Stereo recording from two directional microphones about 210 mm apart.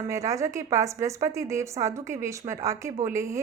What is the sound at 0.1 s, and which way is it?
A woman's voice, 15° right (ahead or behind).